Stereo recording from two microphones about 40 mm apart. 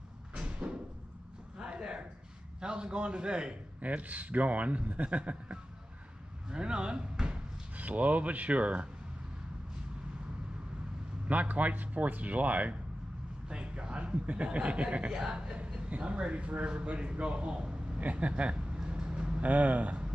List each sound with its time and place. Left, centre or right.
0.3 s a sound: right
2.6 s a man's voice: right
3.8 s speech: right
6.5 s a sound: right
7.7 s speech: right
11.2 s speech: right
13.5 s a man's voice: right
18.9 s vehicle: right
19.4 s speech: right